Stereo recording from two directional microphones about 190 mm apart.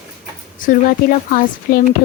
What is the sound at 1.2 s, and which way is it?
Speech, 45° left (ahead or behind).